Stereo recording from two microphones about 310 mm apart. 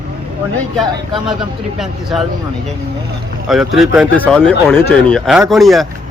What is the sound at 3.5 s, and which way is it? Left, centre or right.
Speech, centre.